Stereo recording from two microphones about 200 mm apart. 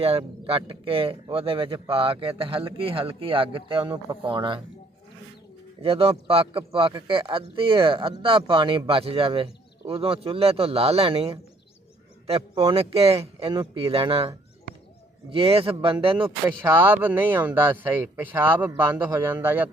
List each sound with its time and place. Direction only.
0.0 s speech: 30° right (ahead or behind)
5.8 s speech: 30° right (ahead or behind)
16.6 s speech: 10° right (ahead or behind)